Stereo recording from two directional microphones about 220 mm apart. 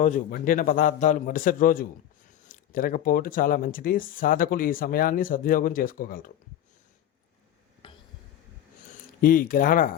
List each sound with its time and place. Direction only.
0.0 s speech: 40° left (ahead or behind)
7.8 s a sound: 20° left (ahead or behind)
9.2 s speech: 40° left (ahead or behind)